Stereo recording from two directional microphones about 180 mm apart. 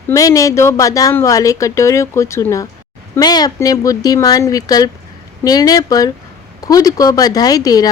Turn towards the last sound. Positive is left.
turn(degrees=20)  # may be behind; listen again after turning